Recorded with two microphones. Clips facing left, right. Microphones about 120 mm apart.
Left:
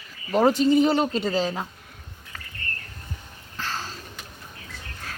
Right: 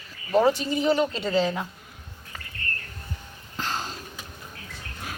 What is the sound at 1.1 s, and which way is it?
Speech, 35° left (ahead or behind).